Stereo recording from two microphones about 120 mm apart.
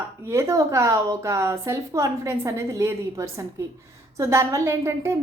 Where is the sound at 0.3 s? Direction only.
25° right (ahead or behind).